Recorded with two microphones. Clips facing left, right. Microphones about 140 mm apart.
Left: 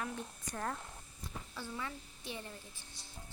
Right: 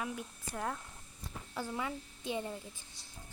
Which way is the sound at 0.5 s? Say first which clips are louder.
Right 2 dB; 5° right (ahead or behind).